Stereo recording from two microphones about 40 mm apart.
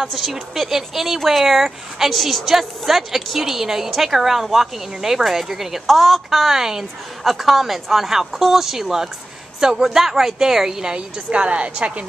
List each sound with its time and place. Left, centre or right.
0.0 s speech: centre
11.2 s a woman's voice: right